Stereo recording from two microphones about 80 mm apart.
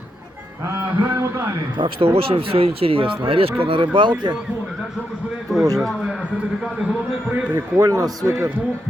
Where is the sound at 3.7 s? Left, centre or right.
Right.